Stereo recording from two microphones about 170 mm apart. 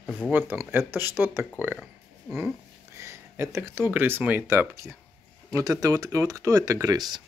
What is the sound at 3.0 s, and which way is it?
Speech, 15° right (ahead or behind).